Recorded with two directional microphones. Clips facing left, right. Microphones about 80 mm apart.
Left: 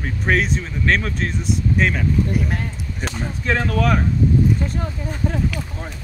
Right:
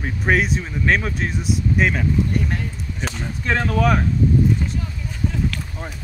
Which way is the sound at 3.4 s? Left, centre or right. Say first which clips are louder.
Right 1 dB; centre.